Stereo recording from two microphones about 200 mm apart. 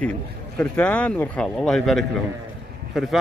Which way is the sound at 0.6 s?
5° left (ahead or behind).